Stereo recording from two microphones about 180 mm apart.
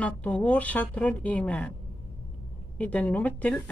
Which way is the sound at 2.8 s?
10° left (ahead or behind).